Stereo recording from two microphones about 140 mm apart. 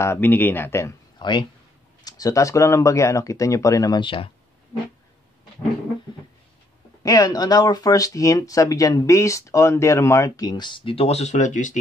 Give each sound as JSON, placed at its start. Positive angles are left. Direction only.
{"t": 0.0, "sound": "speech", "side_deg": 15}
{"t": 1.2, "sound": "speech", "side_deg": 30}
{"t": 7.0, "sound": "speech", "side_deg": 25}